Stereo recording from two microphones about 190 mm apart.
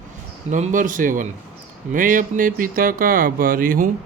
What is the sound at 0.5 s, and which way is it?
Speech, 40° right (ahead or behind).